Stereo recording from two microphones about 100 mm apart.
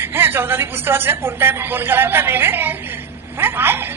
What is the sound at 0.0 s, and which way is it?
A woman's voice, 20° right (ahead or behind).